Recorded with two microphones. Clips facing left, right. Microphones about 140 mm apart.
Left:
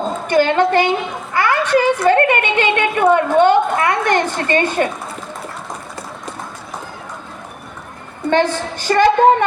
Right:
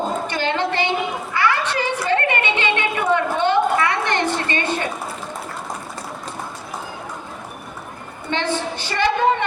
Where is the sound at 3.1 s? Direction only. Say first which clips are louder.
Left 5 dB; 45° left (ahead or behind).